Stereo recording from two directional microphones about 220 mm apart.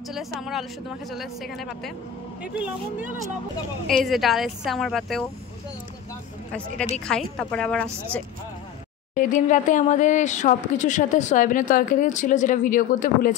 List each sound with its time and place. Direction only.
0.1 s a woman's voice: centre (ahead or behind)
3.8 s a woman's voice: centre (ahead or behind)
7.1 s a woman's voice: 5° left (ahead or behind)
9.1 s speech: 35° left (ahead or behind)